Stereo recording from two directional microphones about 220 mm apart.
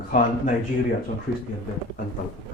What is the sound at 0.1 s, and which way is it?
Speech, 35° left (ahead or behind).